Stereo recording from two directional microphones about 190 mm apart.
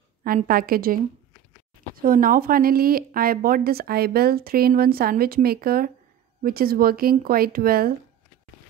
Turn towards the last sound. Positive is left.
turn(degrees=-50)  # may be behind; listen again after turning